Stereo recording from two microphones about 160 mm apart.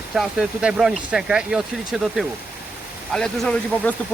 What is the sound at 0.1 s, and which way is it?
Speech, 5° right (ahead or behind).